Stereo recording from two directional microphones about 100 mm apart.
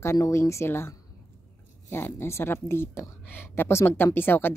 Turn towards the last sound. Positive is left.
turn(degrees=20)  # may be behind; listen again after turning